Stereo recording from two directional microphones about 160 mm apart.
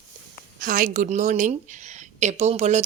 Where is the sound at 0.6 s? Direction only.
60° right (ahead or behind).